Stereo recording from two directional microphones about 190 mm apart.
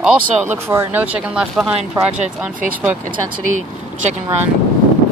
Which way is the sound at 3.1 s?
45° right (ahead or behind).